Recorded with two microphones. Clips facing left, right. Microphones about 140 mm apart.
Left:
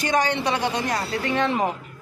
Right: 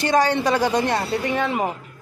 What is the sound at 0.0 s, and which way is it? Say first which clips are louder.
Speech: right 4 dB; 35° right (ahead or behind).